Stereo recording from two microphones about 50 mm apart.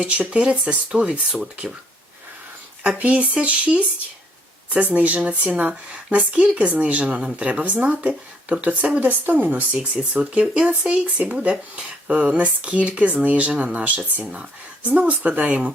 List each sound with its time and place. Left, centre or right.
0.0 s speech: right
3.0 s speech: right